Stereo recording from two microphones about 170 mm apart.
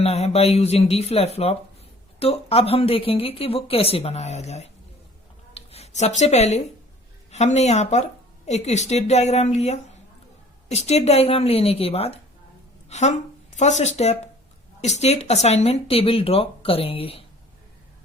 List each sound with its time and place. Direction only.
0.0 s speech: 35° left (ahead or behind)